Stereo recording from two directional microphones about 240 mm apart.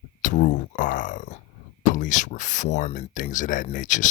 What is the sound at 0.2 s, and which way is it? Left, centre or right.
Speech, left.